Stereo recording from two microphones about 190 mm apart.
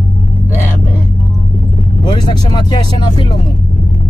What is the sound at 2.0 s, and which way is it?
Speech, 20° left (ahead or behind).